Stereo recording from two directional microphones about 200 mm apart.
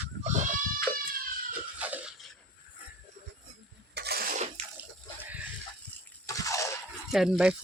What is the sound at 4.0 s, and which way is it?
Cough, 50° right (ahead or behind).